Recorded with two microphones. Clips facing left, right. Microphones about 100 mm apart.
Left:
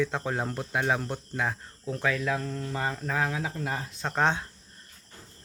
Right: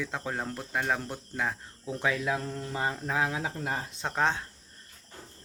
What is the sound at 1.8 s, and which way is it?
Speech, 15° right (ahead or behind).